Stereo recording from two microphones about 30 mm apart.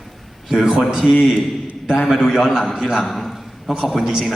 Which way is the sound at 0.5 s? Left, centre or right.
Centre.